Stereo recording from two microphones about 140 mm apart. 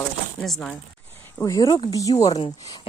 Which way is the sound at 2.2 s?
50° left (ahead or behind).